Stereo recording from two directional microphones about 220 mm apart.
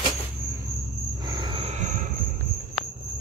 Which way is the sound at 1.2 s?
20° right (ahead or behind).